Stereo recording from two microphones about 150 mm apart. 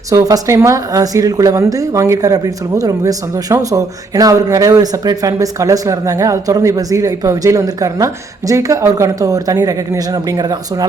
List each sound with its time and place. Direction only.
0.1 s speech: 25° right (ahead or behind)